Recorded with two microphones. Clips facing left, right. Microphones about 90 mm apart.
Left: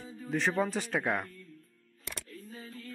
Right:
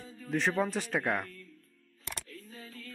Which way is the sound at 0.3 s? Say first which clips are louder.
Even; centre (ahead or behind).